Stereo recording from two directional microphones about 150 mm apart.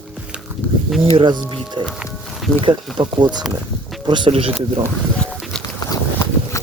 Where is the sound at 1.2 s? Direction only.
30° right (ahead or behind).